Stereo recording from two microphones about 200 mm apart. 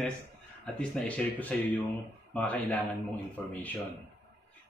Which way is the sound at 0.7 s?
5° left (ahead or behind).